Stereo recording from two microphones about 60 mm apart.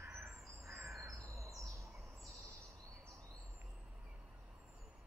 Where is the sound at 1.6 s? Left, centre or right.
Right.